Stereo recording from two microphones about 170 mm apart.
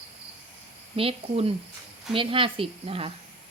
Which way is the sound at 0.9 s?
35° right (ahead or behind).